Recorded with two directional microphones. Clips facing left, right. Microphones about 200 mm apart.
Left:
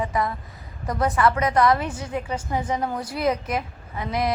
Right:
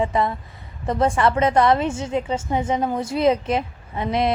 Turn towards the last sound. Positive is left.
turn(degrees=-25)  # may be behind; listen again after turning